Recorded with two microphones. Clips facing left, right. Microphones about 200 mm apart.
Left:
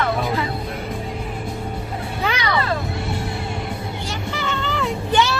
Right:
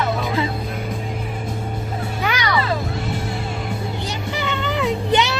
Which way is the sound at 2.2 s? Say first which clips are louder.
Even; 30° left (ahead or behind).